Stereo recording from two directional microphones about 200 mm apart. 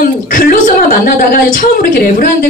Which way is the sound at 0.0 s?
45° left (ahead or behind).